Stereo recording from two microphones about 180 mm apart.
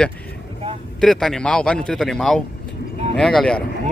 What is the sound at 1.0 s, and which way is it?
Speech, 5° left (ahead or behind).